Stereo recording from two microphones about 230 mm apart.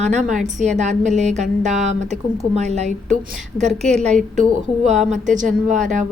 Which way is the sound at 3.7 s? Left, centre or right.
Centre.